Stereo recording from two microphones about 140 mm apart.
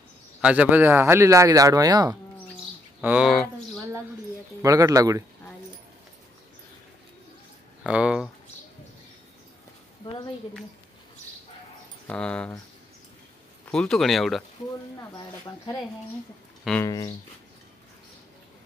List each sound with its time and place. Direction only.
0.4 s speech: 10° right (ahead or behind); by 2.1 s 25° right (ahead or behind)
3.0 s speech: 10° right (ahead or behind)
3.3 s a sound: 5° left (ahead or behind)
4.6 s speech: 25° right (ahead or behind)
7.8 s speech: 5° right (ahead or behind)
12.1 s speech: 5° left (ahead or behind)
13.7 s speech: 5° left (ahead or behind)
15.0 s speech: 20° left (ahead or behind)
16.8 s speech: 25° left (ahead or behind)